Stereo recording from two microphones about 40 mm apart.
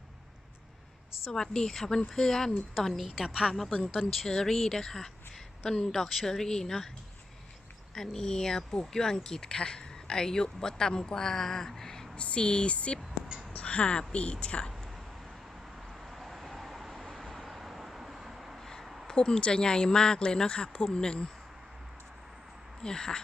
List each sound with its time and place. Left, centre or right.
1.3 s a woman's voice: centre
3.2 s a woman's voice: centre
7.9 s speech: centre
12.1 s speech: left
13.0 s a sound: centre
13.5 s a sound: left
14.1 s speech: left
15.9 s vehicle: centre
18.6 s a sound: centre
19.0 s speech: left
22.8 s speech: centre